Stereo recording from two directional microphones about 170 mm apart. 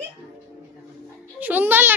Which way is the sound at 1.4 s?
10° right (ahead or behind).